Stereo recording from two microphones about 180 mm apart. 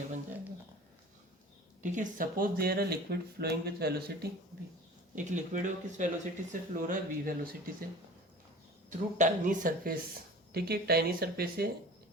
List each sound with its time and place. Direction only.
1.8 s speech: 45° right (ahead or behind); by 4.3 s 60° right (ahead or behind)
5.1 s speech: 45° right (ahead or behind)
8.9 s speech: 45° right (ahead or behind)